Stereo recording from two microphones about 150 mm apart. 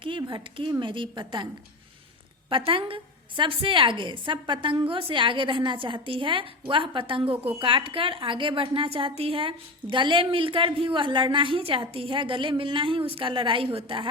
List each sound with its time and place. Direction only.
0.0 s a woman's voice: 35° right (ahead or behind)
2.5 s a woman's voice: 35° right (ahead or behind)